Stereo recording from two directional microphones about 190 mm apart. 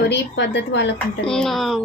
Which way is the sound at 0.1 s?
65° left (ahead or behind).